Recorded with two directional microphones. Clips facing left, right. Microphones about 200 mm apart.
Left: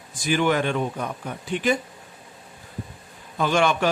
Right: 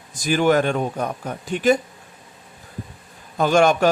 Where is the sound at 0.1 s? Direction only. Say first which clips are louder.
Right 4 dB; 40° right (ahead or behind).